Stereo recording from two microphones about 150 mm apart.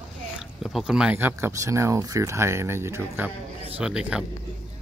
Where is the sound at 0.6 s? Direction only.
5° right (ahead or behind).